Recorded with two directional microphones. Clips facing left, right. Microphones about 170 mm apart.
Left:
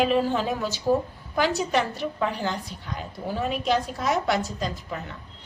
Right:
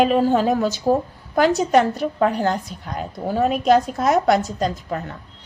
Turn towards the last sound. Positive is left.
turn(degrees=-45)  # may be behind; listen again after turning